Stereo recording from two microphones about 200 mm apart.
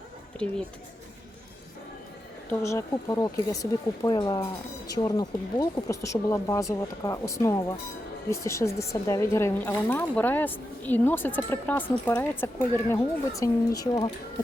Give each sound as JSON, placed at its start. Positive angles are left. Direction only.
{"t": 0.4, "sound": "speech", "side_deg": 5}
{"t": 2.5, "sound": "a woman's voice", "side_deg": 15}